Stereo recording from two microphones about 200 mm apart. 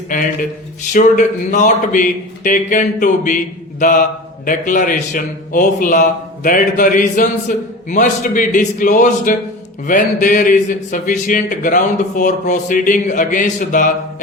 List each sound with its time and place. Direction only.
0.9 s a man's voice: 40° left (ahead or behind)